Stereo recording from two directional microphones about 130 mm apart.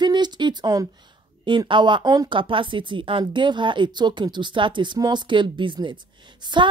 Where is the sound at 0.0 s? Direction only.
35° right (ahead or behind).